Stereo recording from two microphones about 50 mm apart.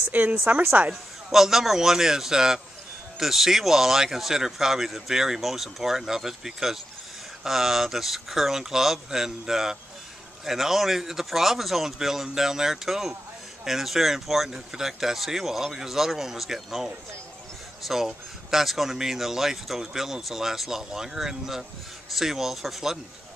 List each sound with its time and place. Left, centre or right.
0.1 s a woman's voice: right
1.3 s speech: centre